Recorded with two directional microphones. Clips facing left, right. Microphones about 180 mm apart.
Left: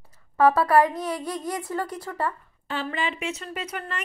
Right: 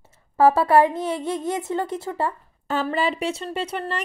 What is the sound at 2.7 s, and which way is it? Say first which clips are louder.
Speech: right 6 dB; 40° right (ahead or behind).